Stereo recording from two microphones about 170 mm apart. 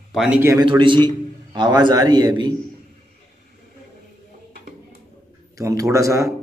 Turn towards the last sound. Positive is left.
turn(degrees=-20)  # may be behind; listen again after turning